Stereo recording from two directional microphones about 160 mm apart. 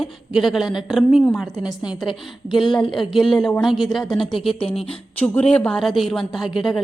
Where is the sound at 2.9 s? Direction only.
Centre (ahead or behind).